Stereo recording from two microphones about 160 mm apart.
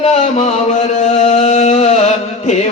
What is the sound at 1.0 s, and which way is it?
Music, 45° left (ahead or behind).